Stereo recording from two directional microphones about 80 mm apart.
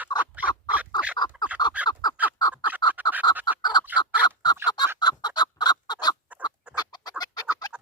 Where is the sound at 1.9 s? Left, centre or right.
Left.